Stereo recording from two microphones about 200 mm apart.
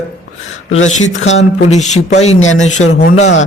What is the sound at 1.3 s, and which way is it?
A man's voice, 35° left (ahead or behind).